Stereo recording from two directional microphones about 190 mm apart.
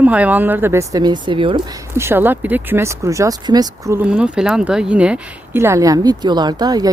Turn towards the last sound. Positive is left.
turn(degrees=-20)  # may be behind; listen again after turning